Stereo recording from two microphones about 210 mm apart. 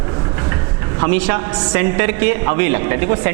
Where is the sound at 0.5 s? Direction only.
20° right (ahead or behind).